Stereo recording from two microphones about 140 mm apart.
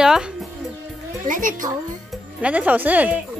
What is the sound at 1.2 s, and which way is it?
Speech, 70° right (ahead or behind).